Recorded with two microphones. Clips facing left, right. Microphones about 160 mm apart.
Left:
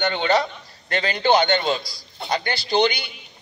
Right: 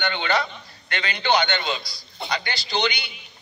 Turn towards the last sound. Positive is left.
turn(degrees=50)  # may be behind; listen again after turning